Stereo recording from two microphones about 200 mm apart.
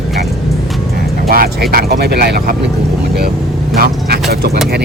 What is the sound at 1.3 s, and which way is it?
Speech, 45° right (ahead or behind).